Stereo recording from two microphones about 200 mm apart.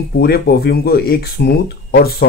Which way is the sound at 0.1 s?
50° left (ahead or behind).